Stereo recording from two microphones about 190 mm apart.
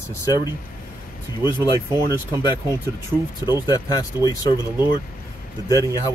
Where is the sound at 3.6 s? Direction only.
20° left (ahead or behind).